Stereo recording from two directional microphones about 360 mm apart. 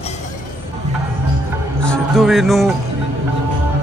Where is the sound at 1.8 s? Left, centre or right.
Centre.